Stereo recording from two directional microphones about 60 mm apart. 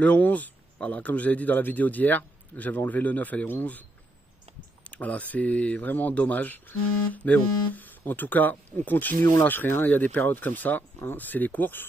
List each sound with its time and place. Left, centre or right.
0.0 s a man's voice: left
4.8 s a man's voice: left